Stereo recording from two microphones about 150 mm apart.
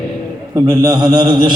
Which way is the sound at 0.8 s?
30° right (ahead or behind).